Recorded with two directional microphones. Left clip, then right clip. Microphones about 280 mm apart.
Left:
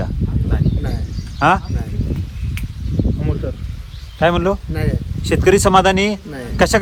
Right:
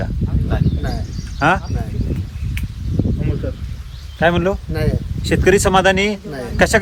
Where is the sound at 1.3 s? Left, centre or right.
Left.